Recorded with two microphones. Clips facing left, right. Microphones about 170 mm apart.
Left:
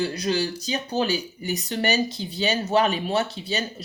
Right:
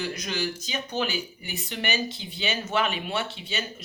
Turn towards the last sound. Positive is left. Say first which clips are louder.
# left 6 dB
turn(degrees=40)  # may be behind; listen again after turning